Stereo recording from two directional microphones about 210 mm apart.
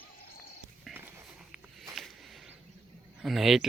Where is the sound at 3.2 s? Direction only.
Centre (ahead or behind).